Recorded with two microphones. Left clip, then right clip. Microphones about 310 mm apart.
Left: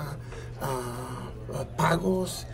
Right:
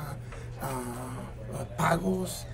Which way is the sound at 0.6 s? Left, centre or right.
Centre.